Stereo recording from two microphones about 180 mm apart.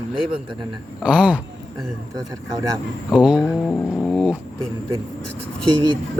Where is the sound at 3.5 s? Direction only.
10° left (ahead or behind).